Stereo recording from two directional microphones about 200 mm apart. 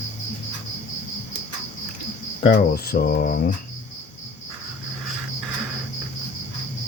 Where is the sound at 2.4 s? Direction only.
50° left (ahead or behind).